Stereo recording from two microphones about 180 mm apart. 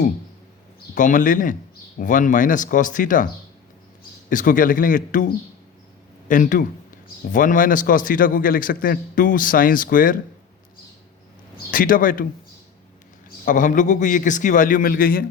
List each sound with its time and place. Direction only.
0.9 s a man's voice: 45° left (ahead or behind)
4.3 s a man's voice: 50° left (ahead or behind)
11.5 s a man's voice: 50° left (ahead or behind)
13.4 s a man's voice: 45° left (ahead or behind)